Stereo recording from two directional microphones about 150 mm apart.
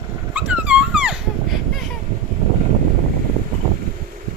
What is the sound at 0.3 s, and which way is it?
Dog, 10° right (ahead or behind).